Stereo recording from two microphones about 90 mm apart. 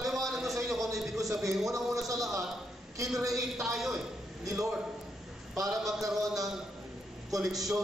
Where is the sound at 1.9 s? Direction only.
40° right (ahead or behind).